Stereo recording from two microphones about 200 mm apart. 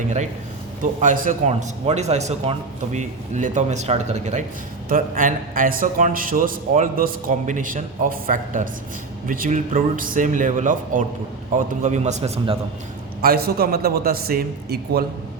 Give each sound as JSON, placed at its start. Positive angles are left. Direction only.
{"t": 0.8, "sound": "a man's voice", "side_deg": -40}
{"t": 13.2, "sound": "a man's voice", "side_deg": -50}